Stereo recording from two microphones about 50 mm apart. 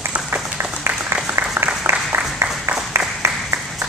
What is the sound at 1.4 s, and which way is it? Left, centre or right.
Applause, right.